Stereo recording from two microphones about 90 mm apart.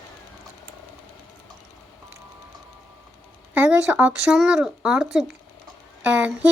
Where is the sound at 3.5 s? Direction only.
20° right (ahead or behind).